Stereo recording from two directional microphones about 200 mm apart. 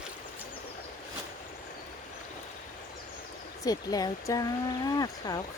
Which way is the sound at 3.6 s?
20° left (ahead or behind).